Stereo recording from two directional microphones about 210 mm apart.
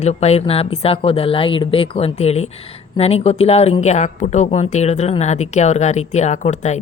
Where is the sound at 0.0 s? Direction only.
30° left (ahead or behind).